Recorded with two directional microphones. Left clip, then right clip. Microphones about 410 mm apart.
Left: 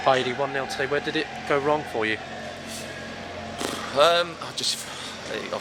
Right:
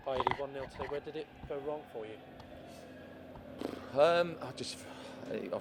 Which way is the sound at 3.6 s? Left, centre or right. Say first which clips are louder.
Left 9 dB; centre.